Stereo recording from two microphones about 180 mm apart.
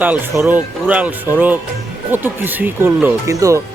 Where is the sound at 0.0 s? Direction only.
10° right (ahead or behind).